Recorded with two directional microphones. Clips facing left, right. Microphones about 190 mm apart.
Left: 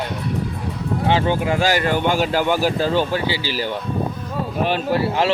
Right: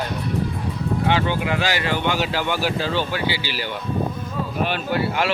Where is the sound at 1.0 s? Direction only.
35° left (ahead or behind).